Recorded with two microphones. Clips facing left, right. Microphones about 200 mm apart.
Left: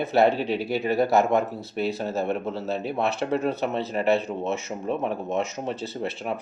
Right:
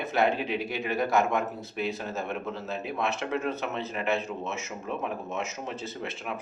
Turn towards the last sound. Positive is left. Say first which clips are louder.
# left 6 dB
turn(degrees=35)  # may be behind; listen again after turning